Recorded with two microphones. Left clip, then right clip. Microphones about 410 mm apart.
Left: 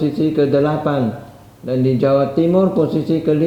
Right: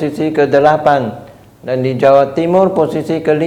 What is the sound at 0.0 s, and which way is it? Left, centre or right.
A man's voice, right.